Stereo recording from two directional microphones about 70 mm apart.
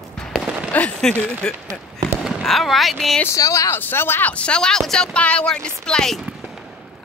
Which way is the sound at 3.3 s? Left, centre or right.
Left.